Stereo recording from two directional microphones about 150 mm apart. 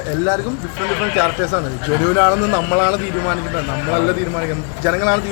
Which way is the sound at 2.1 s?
15° right (ahead or behind).